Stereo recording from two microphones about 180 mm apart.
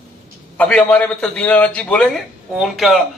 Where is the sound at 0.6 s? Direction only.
5° left (ahead or behind).